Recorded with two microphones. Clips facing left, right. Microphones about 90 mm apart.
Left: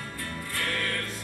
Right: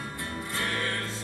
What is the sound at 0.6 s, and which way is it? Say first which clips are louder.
Music: even; 20° right (ahead or behind).